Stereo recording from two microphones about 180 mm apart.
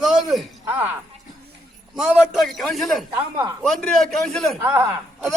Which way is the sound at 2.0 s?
Centre (ahead or behind).